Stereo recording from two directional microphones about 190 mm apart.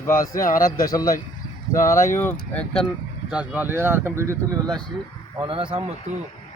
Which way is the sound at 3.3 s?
10° right (ahead or behind).